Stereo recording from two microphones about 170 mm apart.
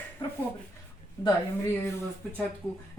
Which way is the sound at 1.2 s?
20° left (ahead or behind).